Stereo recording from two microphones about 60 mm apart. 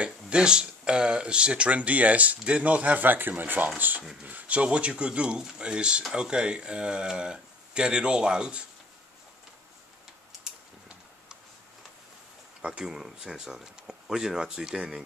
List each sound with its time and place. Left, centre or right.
0.0 s speech: centre
10.4 s a sound: centre
12.6 s speech: centre